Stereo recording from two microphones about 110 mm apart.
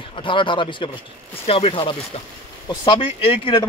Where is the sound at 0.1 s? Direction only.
50° left (ahead or behind).